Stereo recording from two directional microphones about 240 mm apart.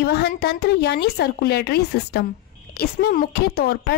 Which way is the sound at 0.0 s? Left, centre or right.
Left.